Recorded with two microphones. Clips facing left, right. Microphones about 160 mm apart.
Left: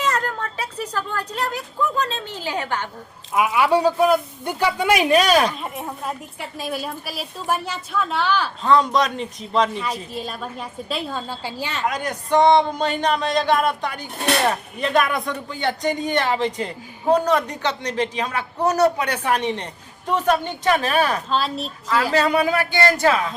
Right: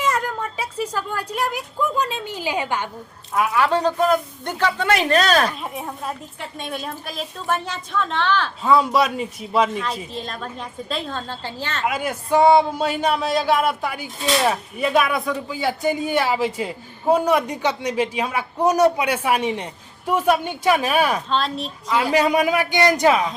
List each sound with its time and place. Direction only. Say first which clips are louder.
0.0 s speech: right 1 dB; 10° right (ahead or behind)
3.3 s speech: left 1 dB; 10° left (ahead or behind)
5.5 s speech: even; centre (ahead or behind)
8.6 s speech: even; 5° right (ahead or behind)
10.2 s speech: left 1 dB; 10° left (ahead or behind)
11.9 s speech: right 1 dB; 5° right (ahead or behind)
21.2 s speech: even; 5° left (ahead or behind)
22.1 s speech: right 2 dB; 15° right (ahead or behind)